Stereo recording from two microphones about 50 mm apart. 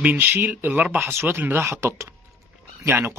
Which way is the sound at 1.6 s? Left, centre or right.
Right.